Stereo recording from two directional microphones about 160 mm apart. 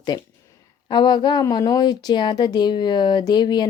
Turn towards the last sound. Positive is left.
turn(degrees=25)  # may be behind; listen again after turning